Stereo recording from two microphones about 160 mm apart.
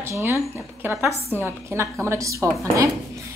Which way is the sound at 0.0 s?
15° right (ahead or behind).